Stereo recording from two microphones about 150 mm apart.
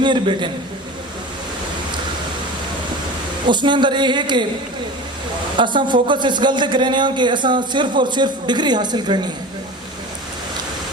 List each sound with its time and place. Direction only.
0.0 s a man's voice: 30° right (ahead or behind)
3.4 s a man's voice: 30° right (ahead or behind)
5.5 s a man's voice: 30° right (ahead or behind)